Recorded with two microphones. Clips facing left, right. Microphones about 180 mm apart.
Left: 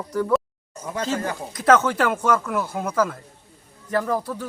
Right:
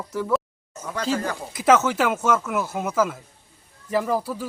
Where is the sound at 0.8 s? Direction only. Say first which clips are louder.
Left 2 dB; 25° left (ahead or behind).